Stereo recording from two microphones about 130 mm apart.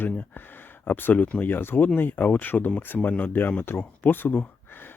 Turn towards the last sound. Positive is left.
turn(degrees=15)  # may be behind; listen again after turning